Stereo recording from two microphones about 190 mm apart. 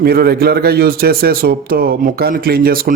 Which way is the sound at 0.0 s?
55° right (ahead or behind).